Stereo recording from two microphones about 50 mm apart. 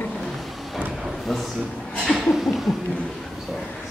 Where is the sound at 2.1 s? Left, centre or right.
Centre.